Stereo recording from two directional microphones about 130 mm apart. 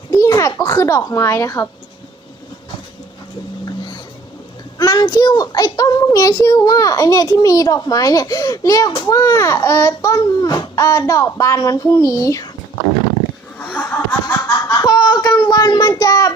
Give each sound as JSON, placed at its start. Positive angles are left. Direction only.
{"t": 0.1, "sound": "a child's voice", "side_deg": 25}
{"t": 3.7, "sound": "vehicle", "side_deg": 35}
{"t": 4.8, "sound": "a child's voice", "side_deg": 30}
{"t": 13.7, "sound": "chuckle", "side_deg": 15}
{"t": 14.7, "sound": "child singing", "side_deg": 30}